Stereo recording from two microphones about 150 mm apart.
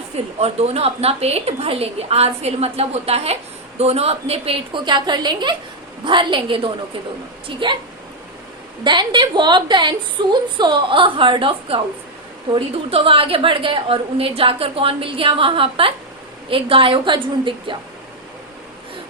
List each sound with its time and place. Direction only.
0.3 s a woman's voice: 45° right (ahead or behind)
8.8 s a woman's voice: 30° right (ahead or behind)